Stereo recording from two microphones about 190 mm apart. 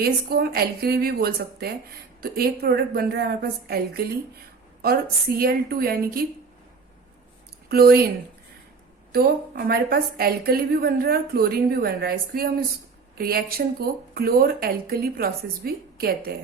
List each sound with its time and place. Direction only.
0.0 s a woman's voice: 55° right (ahead or behind)
5.4 s a woman's voice: 50° right (ahead or behind)
7.7 s a woman's voice: 55° right (ahead or behind)
9.1 s a woman's voice: 50° right (ahead or behind)